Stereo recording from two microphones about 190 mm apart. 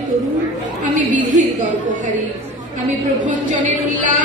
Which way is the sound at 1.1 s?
40° right (ahead or behind).